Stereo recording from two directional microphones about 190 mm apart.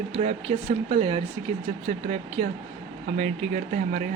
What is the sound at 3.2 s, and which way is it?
Speech, 40° right (ahead or behind).